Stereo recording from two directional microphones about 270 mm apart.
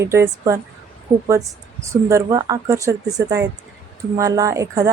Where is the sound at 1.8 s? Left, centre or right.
Centre.